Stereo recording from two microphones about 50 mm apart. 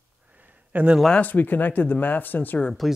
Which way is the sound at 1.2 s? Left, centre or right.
Left.